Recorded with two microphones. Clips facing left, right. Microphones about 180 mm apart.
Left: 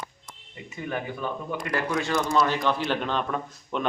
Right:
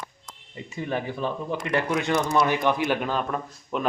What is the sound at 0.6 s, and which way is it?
A man's voice, 30° right (ahead or behind).